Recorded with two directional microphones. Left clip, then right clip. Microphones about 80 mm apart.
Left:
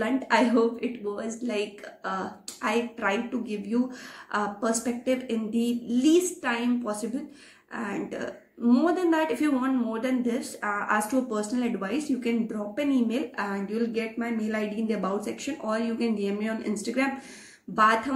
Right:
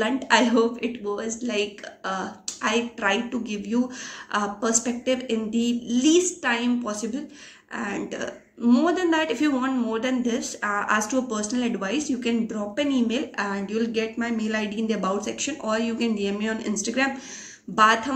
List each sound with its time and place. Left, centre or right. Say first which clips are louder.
0.0 s a woman's voice: right 3 dB; right